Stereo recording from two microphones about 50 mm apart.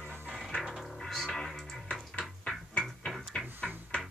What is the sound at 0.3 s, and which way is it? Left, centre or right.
Music, centre.